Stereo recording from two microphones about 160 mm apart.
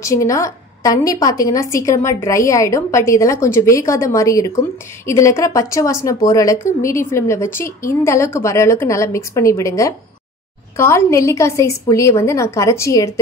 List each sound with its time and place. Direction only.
0.0 s a woman's voice: 20° left (ahead or behind)